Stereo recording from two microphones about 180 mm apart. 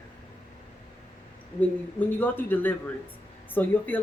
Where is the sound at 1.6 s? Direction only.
10° left (ahead or behind).